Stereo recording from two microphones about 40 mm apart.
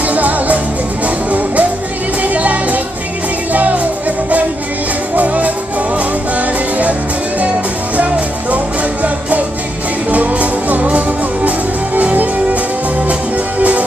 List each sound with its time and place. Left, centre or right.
0.1 s music: right
5.1 s music: right
6.8 s music: right
10.1 s music: right
13.6 s music: right